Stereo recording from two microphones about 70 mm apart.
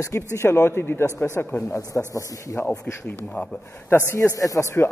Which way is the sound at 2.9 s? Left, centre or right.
Left.